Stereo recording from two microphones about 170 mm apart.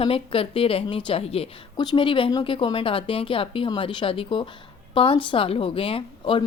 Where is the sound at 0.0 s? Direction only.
35° left (ahead or behind).